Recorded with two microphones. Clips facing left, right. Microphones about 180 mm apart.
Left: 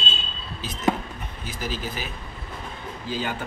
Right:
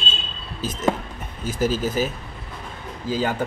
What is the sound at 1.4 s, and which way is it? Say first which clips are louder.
A man's voice: right 9 dB; 45° right (ahead or behind).